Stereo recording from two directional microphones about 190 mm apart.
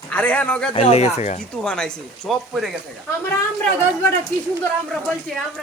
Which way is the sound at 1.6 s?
5° left (ahead or behind).